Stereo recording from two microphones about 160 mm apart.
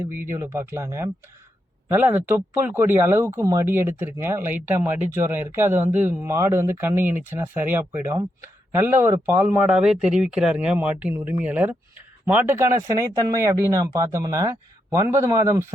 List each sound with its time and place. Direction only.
0.0 s speech: 15° right (ahead or behind)
9.6 s speech: 5° right (ahead or behind)